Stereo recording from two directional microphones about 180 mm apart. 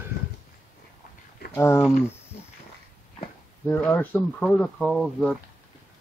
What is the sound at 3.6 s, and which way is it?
Speech, 10° left (ahead or behind).